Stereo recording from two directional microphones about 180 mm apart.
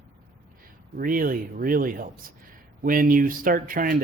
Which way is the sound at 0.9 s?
50° right (ahead or behind).